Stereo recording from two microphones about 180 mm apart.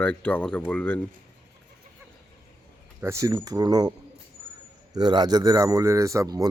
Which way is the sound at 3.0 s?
15° right (ahead or behind).